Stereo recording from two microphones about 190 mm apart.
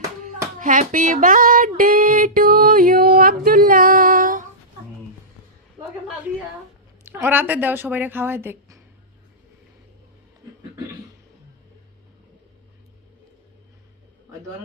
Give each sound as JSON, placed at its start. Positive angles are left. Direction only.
{"t": 0.2, "sound": "child singing", "side_deg": -45}
{"t": 5.8, "sound": "a sound", "side_deg": -20}
{"t": 7.1, "sound": "a woman's voice", "side_deg": -10}